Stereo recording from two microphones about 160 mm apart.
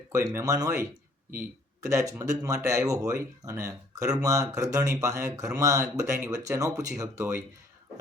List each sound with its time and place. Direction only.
0.1 s speech: 20° right (ahead or behind)